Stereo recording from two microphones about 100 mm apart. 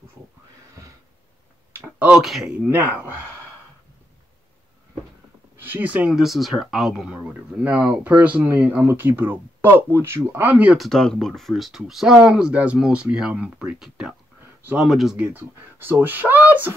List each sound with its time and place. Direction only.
2.0 s speech: 10° right (ahead or behind)
2.7 s speech: 20° right (ahead or behind)
5.6 s speech: 20° right (ahead or behind)
10.8 s speech: 5° left (ahead or behind)
15.1 s speech: 20° right (ahead or behind)